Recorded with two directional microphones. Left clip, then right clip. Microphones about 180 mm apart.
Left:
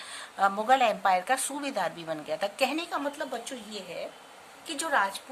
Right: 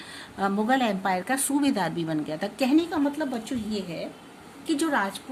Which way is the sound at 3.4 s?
5° left (ahead or behind).